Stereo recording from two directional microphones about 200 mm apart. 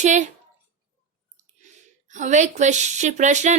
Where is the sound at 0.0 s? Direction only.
35° right (ahead or behind).